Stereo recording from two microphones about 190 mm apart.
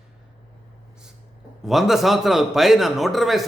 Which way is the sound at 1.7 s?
Centre (ahead or behind).